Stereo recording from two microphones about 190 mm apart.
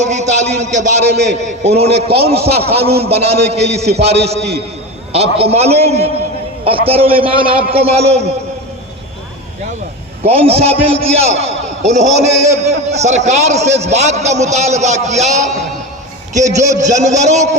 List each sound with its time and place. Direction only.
0.0 s a man's voice: 35° right (ahead or behind)
1.1 s a man's voice: 60° right (ahead or behind)
1.5 s a man's voice: 35° right (ahead or behind)
4.4 s a man's voice: 60° right (ahead or behind)
5.1 s a man's voice: 35° right (ahead or behind)
10.2 s a man's voice: 30° right (ahead or behind)